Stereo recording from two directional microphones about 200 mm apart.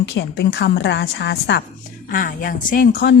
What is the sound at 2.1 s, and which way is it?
A woman's voice, 45° left (ahead or behind).